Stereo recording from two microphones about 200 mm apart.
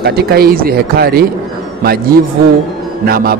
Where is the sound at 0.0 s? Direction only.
50° right (ahead or behind).